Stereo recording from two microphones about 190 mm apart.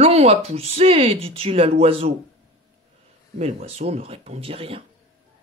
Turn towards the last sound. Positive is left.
turn(degrees=-30)  # may be behind; listen again after turning